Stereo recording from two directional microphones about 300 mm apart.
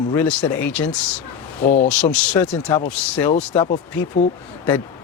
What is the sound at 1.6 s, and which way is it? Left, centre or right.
Speech, left.